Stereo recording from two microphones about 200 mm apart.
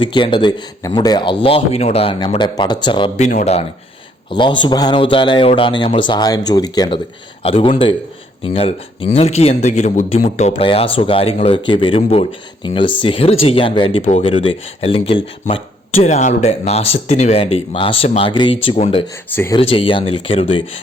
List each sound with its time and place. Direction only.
0.0 s speech: 25° left (ahead or behind)
3.2 s speech: 35° left (ahead or behind)
19.3 s speech: 10° left (ahead or behind)
19.5 s speech: 25° left (ahead or behind)